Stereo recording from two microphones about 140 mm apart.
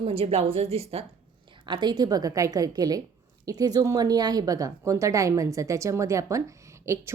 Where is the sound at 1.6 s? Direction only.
30° right (ahead or behind).